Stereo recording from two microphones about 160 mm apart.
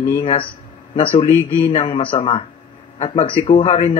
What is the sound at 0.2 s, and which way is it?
Speech, 35° left (ahead or behind).